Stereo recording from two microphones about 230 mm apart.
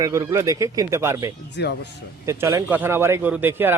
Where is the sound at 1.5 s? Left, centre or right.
Left.